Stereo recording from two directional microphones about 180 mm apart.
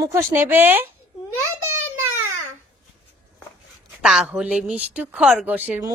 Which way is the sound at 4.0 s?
5° right (ahead or behind).